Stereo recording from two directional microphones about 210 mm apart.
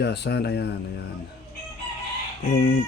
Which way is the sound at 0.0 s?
55° left (ahead or behind).